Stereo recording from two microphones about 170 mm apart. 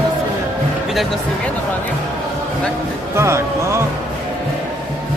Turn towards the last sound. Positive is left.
turn(degrees=-15)  # may be behind; listen again after turning